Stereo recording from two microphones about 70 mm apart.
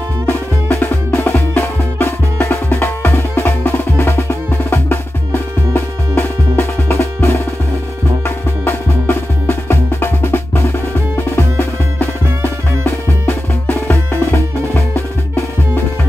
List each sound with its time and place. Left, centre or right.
0.3 s music: left
6.6 s music: left
8.6 s music: left